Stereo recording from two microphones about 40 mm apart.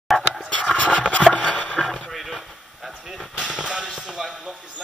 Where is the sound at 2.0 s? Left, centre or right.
Centre.